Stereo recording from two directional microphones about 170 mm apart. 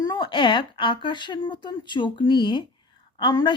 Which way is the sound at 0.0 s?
25° left (ahead or behind).